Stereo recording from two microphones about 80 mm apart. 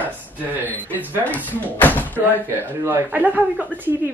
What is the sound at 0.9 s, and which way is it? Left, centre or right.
Speech, right.